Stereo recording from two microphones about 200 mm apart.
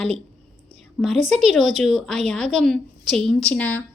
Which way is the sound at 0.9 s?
Centre (ahead or behind).